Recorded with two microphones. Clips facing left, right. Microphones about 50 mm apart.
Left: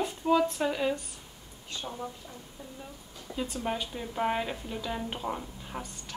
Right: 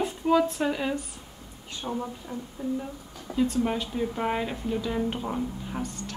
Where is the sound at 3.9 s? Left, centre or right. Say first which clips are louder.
Right 3 dB; centre.